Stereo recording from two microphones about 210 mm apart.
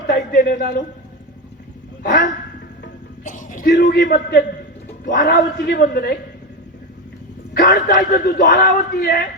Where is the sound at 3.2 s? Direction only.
40° left (ahead or behind).